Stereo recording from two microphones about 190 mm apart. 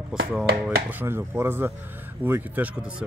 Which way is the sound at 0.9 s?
10° right (ahead or behind).